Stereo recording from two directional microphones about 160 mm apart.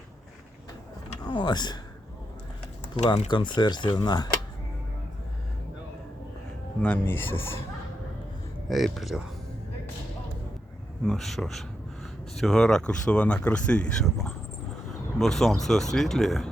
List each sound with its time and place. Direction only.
1.2 s speech: 30° left (ahead or behind)
3.2 s speech: 30° left (ahead or behind)
6.8 s speech: 10° left (ahead or behind)
8.7 s speech: centre (ahead or behind)
11.0 s speech: centre (ahead or behind)